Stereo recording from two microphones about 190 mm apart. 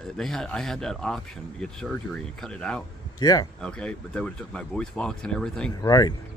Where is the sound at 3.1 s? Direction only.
20° left (ahead or behind).